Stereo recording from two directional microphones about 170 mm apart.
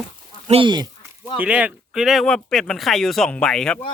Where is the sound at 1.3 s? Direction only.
10° right (ahead or behind).